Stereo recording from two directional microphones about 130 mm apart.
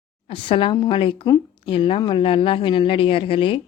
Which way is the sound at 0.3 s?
45° left (ahead or behind).